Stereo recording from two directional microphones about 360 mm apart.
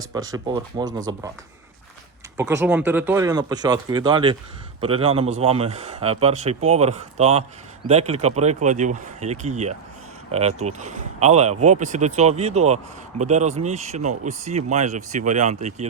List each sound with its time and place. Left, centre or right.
0.1 s speech: centre
2.4 s speech: centre